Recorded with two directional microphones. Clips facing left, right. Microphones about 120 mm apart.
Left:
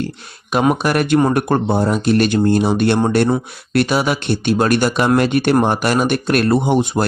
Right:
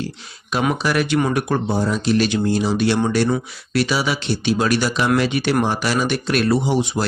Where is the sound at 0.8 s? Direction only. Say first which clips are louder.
Left 4 dB; 50° left (ahead or behind).